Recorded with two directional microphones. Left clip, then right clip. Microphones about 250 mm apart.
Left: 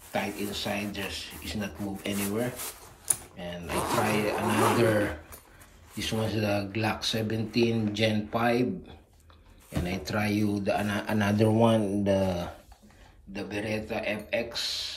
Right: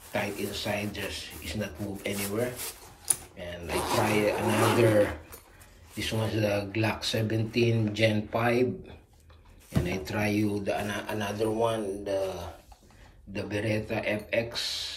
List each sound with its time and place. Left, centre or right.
0.1 s speech: centre
9.8 s speech: centre
11.6 s mantra: left
13.3 s speech: centre